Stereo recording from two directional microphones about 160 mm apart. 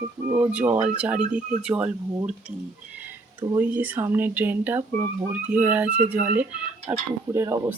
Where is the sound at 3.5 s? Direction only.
10° right (ahead or behind).